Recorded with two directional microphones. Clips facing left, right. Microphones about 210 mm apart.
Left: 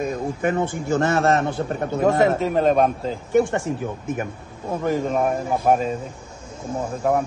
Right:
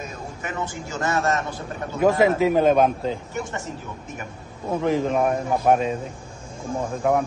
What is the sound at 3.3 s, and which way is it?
Speech, 55° left (ahead or behind).